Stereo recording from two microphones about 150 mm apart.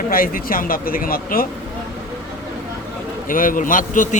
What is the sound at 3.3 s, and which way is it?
Speech, 65° left (ahead or behind).